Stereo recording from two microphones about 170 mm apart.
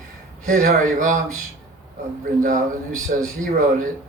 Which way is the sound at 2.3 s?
50° right (ahead or behind).